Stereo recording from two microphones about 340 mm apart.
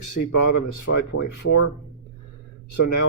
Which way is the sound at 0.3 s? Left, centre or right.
Left.